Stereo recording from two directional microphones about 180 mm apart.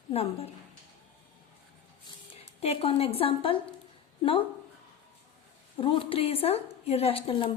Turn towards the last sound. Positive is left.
turn(degrees=30)  # may be behind; listen again after turning